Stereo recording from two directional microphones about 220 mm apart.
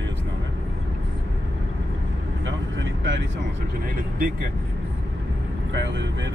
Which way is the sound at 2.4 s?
60° right (ahead or behind).